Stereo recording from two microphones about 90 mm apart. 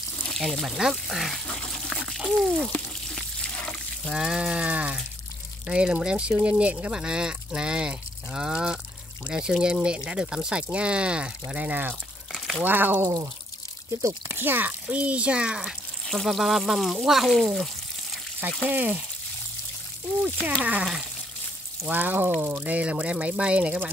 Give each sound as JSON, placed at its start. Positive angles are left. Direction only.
{"t": 0.2, "sound": "speech", "side_deg": 5}
{"t": 3.2, "sound": "water", "side_deg": 10}
{"t": 4.1, "sound": "a sound", "side_deg": -10}
{"t": 5.7, "sound": "speech", "side_deg": -10}
{"t": 12.3, "sound": "a sound", "side_deg": 0}
{"t": 12.6, "sound": "frying", "side_deg": -20}
{"t": 14.0, "sound": "speech", "side_deg": -25}
{"t": 16.1, "sound": "speech", "side_deg": 0}
{"t": 18.7, "sound": "speech", "side_deg": -15}
{"t": 20.6, "sound": "speech", "side_deg": -15}
{"t": 21.8, "sound": "frying", "side_deg": -20}
{"t": 22.4, "sound": "speech", "side_deg": -20}